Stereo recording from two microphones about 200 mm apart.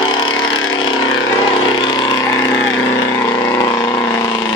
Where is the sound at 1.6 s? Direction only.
25° left (ahead or behind).